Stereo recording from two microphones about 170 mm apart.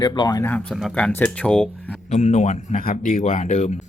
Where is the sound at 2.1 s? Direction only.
40° left (ahead or behind).